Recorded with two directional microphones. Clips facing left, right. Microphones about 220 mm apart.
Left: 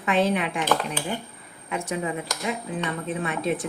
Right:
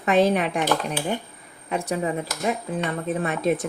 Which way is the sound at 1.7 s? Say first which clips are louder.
Right 3 dB; 35° right (ahead or behind).